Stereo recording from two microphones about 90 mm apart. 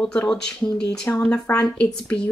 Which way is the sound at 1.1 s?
20° left (ahead or behind).